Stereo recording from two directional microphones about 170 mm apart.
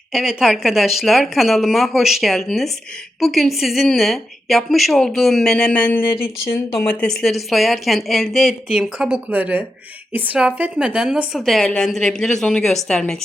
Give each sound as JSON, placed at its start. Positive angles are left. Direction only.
{"t": 0.1, "sound": "a woman's voice", "side_deg": 0}
{"t": 7.0, "sound": "a woman's voice", "side_deg": 5}